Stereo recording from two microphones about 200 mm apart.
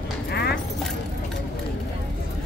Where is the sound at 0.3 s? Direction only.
55° left (ahead or behind).